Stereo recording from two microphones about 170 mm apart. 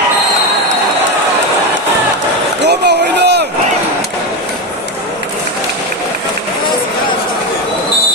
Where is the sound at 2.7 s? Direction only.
80° right.